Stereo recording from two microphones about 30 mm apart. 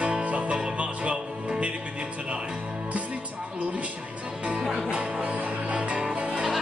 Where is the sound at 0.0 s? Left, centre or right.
Right.